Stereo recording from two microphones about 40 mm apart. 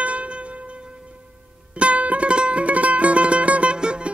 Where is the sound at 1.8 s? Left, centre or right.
Right.